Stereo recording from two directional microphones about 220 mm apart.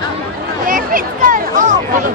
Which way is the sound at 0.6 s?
35° right (ahead or behind).